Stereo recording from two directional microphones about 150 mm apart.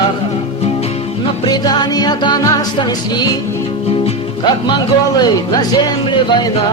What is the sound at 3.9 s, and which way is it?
Music, 40° left (ahead or behind).